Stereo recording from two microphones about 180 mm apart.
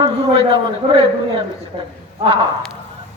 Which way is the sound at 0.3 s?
35° right (ahead or behind).